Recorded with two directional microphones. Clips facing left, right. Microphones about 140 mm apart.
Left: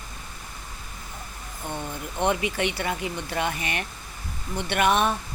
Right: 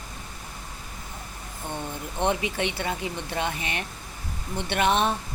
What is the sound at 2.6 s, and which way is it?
Speech, 25° right (ahead or behind).